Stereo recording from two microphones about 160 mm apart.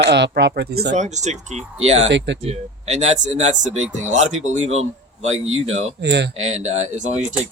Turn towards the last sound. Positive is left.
turn(degrees=-45)  # may be behind; listen again after turning